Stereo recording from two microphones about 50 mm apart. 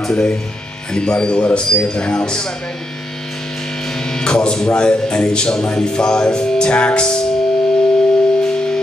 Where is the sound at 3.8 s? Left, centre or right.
Centre.